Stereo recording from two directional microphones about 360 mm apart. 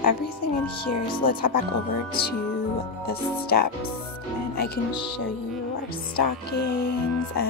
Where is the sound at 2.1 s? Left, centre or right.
Left.